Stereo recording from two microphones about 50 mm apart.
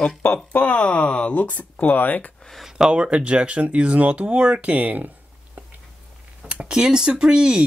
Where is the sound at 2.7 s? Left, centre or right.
Centre.